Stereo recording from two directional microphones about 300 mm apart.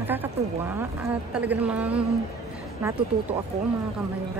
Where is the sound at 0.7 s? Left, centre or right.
Centre.